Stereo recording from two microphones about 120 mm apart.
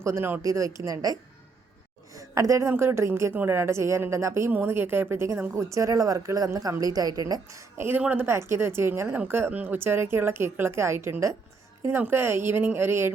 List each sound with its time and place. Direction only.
0.0 s a woman's voice: 20° right (ahead or behind)
7.8 s a woman's voice: 15° right (ahead or behind)